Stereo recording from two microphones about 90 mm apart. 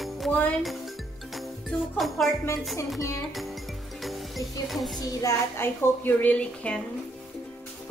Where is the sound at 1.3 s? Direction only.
Centre (ahead or behind).